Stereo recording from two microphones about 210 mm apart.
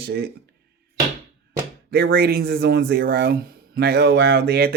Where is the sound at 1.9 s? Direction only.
50° right (ahead or behind).